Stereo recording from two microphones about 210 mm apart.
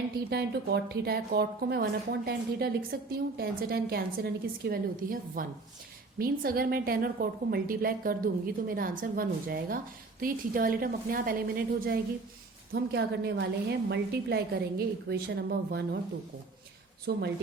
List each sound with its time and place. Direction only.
0.3 s a woman's voice: 50° right (ahead or behind)
17.1 s a woman's voice: 50° right (ahead or behind)